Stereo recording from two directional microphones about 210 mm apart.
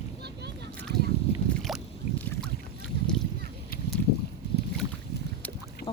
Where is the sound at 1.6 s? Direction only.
5° left (ahead or behind).